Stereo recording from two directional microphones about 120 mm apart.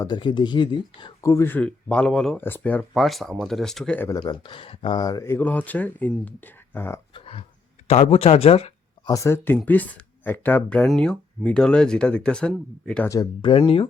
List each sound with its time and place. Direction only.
0.0 s speech: 40° left (ahead or behind)
1.2 s speech: 25° left (ahead or behind); by 2.4 s 5° left (ahead or behind)
2.4 s speech: 15° left (ahead or behind)
2.9 s speech: centre (ahead or behind)
4.2 s speech: 40° left (ahead or behind)
4.9 s speech: 30° left (ahead or behind)
7.1 s a sound: 45° left (ahead or behind)
7.9 s speech: 60° left (ahead or behind)
9.0 s speech: 25° left (ahead or behind); by 13.1 s 5° left (ahead or behind)
13.1 s speech: 35° left (ahead or behind)
13.5 s speech: 45° left (ahead or behind)